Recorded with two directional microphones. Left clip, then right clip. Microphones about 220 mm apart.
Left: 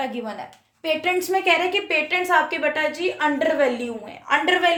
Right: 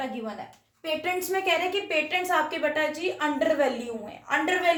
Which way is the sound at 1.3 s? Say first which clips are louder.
Left 5 dB; 45° left (ahead or behind).